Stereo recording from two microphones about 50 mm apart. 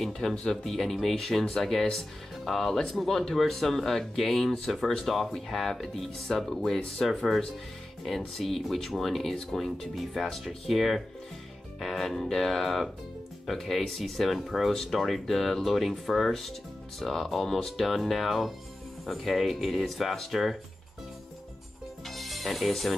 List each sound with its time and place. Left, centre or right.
0.0 s speech: centre
22.0 s music: centre